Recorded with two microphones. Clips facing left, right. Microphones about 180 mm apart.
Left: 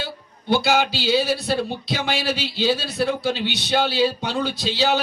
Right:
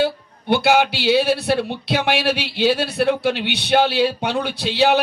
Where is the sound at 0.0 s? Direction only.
60° right (ahead or behind).